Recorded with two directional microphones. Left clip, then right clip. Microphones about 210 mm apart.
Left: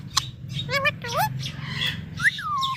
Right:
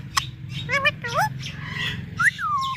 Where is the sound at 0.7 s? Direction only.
15° left (ahead or behind).